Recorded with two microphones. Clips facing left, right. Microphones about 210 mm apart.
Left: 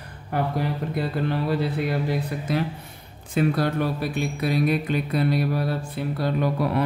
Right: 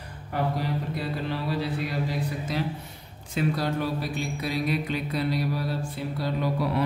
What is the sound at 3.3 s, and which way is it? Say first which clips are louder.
Mantra: left 4 dB; 55° left (ahead or behind).